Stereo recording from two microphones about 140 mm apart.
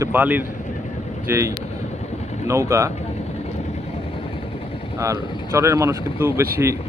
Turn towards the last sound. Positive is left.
turn(degrees=-20)  # may be behind; listen again after turning